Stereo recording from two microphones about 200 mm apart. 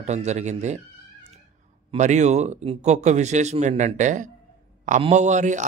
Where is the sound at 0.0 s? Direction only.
35° right (ahead or behind).